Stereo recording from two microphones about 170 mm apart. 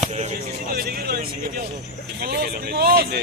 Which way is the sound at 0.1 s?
40° right (ahead or behind).